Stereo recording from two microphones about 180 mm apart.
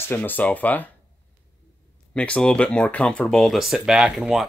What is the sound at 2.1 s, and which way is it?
Speech, 5° left (ahead or behind).